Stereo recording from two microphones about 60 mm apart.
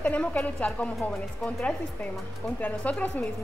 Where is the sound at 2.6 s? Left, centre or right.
Left.